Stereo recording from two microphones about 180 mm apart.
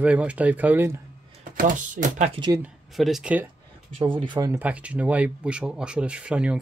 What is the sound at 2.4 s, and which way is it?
Speech, 30° right (ahead or behind).